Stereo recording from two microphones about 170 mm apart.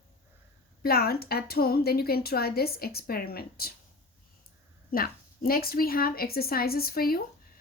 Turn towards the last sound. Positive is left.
turn(degrees=60)  # may be behind; listen again after turning